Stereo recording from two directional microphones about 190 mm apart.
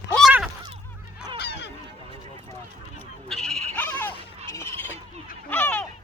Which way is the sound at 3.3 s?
Centre (ahead or behind).